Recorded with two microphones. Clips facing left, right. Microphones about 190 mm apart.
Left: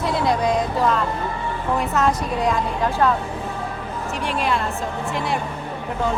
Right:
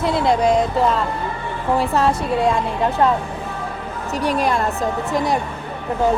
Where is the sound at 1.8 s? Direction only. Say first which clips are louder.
Right 3 dB; 30° right (ahead or behind).